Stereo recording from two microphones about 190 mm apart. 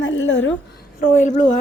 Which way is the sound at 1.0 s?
40° left (ahead or behind).